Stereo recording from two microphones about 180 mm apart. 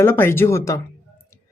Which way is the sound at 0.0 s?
15° left (ahead or behind).